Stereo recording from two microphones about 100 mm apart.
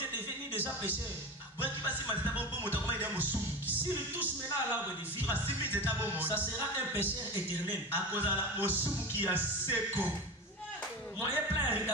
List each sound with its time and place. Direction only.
0.5 s a man's voice: 15° right (ahead or behind)
1.6 s music: 20° right (ahead or behind)
11.3 s a sound: 20° right (ahead or behind)